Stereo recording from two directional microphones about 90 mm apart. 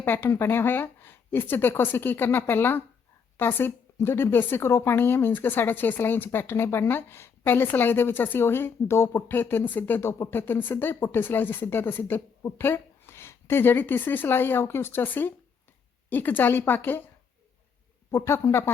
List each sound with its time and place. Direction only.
0.0 s a woman's voice: 25° left (ahead or behind)
18.1 s speech: 30° left (ahead or behind)